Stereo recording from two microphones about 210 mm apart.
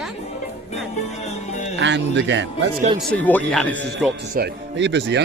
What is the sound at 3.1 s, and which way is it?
Speech, 5° left (ahead or behind).